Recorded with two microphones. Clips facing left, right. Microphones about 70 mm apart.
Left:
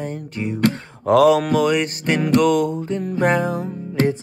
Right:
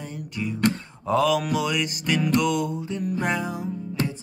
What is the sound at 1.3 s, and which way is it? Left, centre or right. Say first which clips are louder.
Music: left 7 dB; left.